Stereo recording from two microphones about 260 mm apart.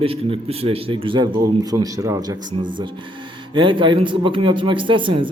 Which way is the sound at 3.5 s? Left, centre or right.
Centre.